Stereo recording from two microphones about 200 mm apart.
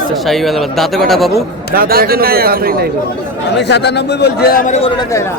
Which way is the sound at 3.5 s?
60° left (ahead or behind).